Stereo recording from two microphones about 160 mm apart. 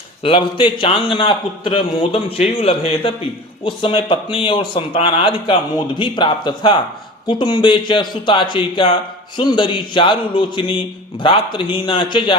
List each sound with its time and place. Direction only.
0.2 s speech: 35° left (ahead or behind)